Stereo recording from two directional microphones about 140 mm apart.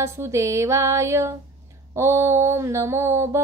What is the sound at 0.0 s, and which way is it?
Mantra, 20° right (ahead or behind).